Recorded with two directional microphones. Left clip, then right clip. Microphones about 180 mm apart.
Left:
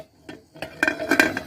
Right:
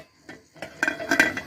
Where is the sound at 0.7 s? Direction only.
35° left (ahead or behind).